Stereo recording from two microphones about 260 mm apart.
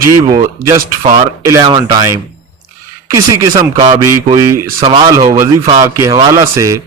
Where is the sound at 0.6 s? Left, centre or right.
Centre.